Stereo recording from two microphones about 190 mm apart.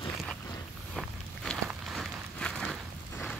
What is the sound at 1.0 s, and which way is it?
Walk, centre (ahead or behind).